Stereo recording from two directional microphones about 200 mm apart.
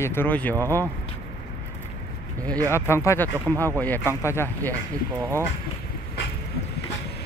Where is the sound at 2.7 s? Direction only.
15° left (ahead or behind).